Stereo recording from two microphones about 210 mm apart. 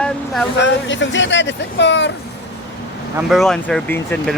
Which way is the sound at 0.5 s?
60° left (ahead or behind).